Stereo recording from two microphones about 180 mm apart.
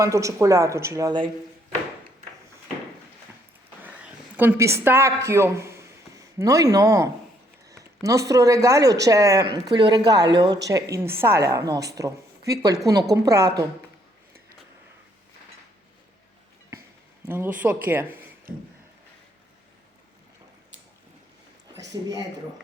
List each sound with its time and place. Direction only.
0.0 s speech: 15° right (ahead or behind)
4.0 s a woman's voice: 10° right (ahead or behind)
17.2 s speech: 10° right (ahead or behind)